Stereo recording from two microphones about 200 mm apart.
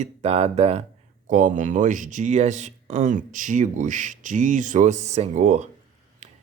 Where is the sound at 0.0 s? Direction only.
30° right (ahead or behind).